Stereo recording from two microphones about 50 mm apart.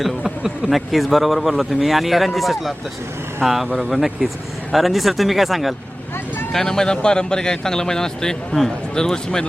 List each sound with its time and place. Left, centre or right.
0.3 s a sound: centre
0.9 s a man's voice: centre
6.5 s speech: centre